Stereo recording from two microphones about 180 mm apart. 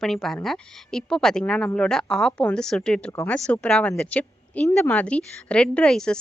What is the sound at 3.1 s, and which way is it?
Speech, 15° left (ahead or behind).